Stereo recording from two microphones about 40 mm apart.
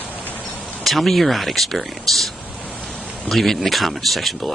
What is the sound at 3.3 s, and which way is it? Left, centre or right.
Speech, centre.